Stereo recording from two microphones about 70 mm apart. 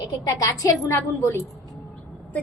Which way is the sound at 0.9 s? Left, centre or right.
Left.